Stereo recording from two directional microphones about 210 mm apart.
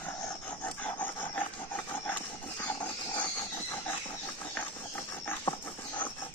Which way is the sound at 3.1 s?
20° left (ahead or behind).